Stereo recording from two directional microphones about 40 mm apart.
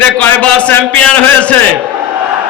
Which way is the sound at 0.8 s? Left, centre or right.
Left.